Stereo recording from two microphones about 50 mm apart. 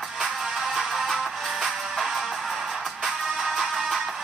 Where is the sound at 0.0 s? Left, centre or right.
Centre.